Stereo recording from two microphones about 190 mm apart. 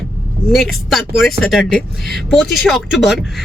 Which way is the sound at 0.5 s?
Centre (ahead or behind).